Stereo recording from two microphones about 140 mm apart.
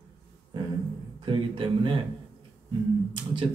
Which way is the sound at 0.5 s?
35° right (ahead or behind).